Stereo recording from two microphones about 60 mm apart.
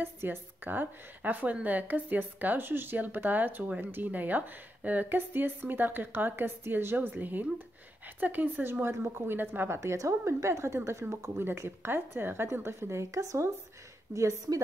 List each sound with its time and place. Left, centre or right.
0.0 s a woman's voice: right
9.8 s a woman's voice: right